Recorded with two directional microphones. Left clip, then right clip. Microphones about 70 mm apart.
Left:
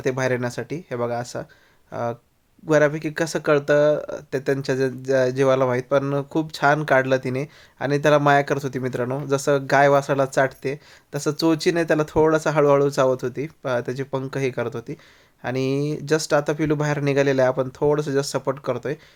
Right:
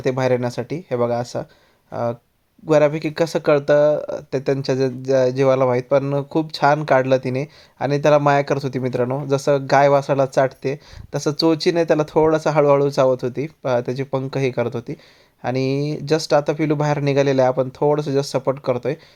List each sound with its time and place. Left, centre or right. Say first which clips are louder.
0.0 s speech: right 4 dB; right
1.9 s speech: right 3 dB; centre
2.6 s speech: right 3 dB; right
2.9 s speech: right 4 dB; right
3.2 s speech: right 3 dB; right